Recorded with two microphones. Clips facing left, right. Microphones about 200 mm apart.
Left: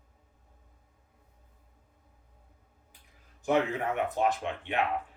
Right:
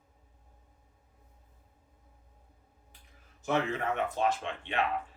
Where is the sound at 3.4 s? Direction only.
15° left (ahead or behind).